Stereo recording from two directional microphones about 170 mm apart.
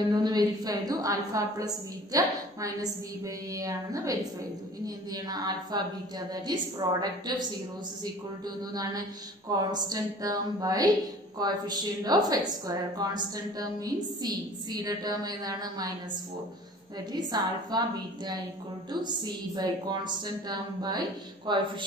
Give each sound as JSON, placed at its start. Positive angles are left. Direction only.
{"t": 0.1, "sound": "a woman's voice", "side_deg": -25}
{"t": 8.7, "sound": "a woman's voice", "side_deg": -20}
{"t": 17.1, "sound": "a woman's voice", "side_deg": -25}